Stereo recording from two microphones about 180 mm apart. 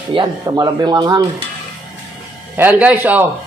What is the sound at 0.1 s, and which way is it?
Speech, 25° right (ahead or behind).